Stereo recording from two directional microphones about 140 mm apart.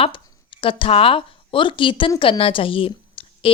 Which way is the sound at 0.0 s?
40° left (ahead or behind).